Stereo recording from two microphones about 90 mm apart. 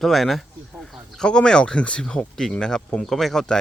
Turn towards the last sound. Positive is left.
turn(degrees=5)  # may be behind; listen again after turning